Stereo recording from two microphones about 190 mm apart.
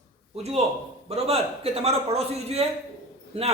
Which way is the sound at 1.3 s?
30° right (ahead or behind).